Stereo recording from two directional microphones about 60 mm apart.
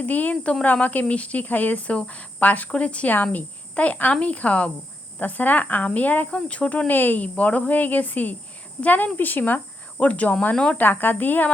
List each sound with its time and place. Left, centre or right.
0.0 s speech: left
10.5 s speech: centre
10.8 s speech: left